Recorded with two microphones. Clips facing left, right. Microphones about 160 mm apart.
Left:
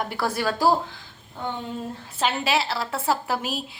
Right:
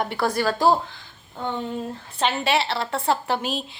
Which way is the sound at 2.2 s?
Centre (ahead or behind).